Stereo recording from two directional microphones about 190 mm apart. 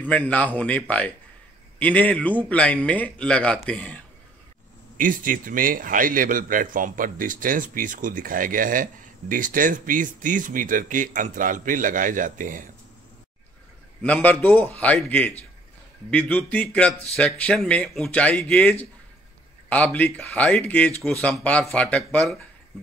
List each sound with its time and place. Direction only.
0.0 s speech: 10° left (ahead or behind)
4.9 s speech: 45° right (ahead or behind)
14.0 s speech: 5° left (ahead or behind)